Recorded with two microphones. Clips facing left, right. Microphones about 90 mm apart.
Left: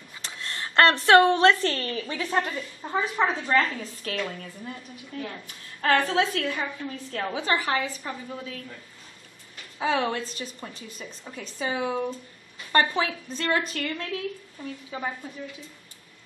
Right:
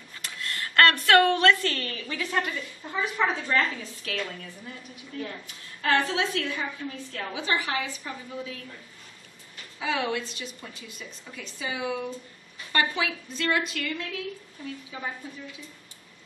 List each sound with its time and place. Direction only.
0.2 s a woman's voice: 25° left (ahead or behind)
9.8 s a woman's voice: 35° left (ahead or behind)